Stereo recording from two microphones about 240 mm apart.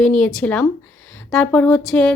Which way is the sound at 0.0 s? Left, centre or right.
Centre.